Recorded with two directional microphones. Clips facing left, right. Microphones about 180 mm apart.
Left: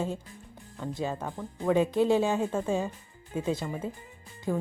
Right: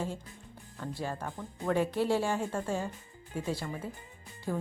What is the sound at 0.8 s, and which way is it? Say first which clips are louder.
Speech: left 4 dB; 15° left (ahead or behind).